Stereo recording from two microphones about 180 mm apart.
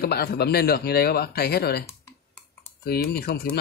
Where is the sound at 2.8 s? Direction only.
60° left (ahead or behind).